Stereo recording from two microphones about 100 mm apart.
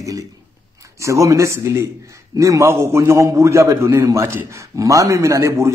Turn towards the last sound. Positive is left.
turn(degrees=-30)  # may be behind; listen again after turning